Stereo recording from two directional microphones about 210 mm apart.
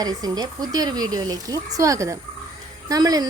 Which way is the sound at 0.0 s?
20° right (ahead or behind).